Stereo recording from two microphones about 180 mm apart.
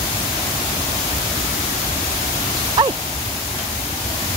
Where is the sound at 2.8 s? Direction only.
25° right (ahead or behind).